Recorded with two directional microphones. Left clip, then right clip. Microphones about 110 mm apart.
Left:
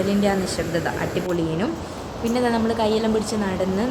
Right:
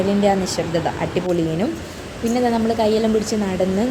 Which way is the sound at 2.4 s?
25° right (ahead or behind).